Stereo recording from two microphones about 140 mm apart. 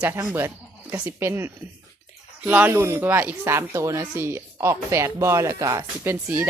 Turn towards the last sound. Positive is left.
turn(degrees=-20)  # may be behind; listen again after turning